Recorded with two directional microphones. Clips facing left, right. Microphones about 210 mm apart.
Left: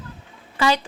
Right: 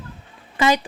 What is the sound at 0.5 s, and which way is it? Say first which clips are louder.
Speech: right 2 dB; 20° right (ahead or behind).